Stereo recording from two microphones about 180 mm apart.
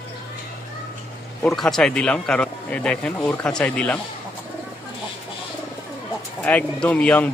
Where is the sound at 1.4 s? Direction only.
Centre (ahead or behind).